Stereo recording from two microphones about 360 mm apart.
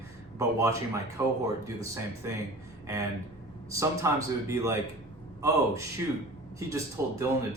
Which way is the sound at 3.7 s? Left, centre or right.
Centre.